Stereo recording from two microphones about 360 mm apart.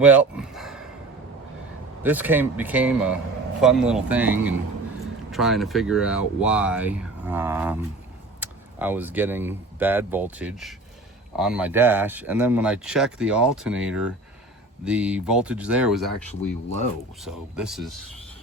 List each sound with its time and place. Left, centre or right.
0.0 s a sound: centre
2.0 s speech: centre
16.3 s speech: centre
17.2 s speech: centre